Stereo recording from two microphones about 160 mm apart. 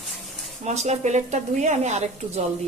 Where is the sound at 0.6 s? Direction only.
45° right (ahead or behind).